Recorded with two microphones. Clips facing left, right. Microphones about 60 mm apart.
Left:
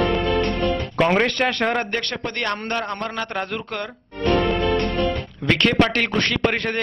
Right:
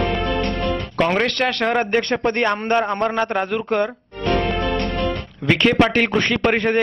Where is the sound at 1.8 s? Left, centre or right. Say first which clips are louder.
Right 6 dB; centre.